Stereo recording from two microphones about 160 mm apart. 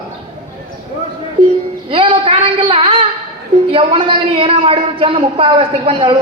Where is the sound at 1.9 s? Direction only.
35° right (ahead or behind).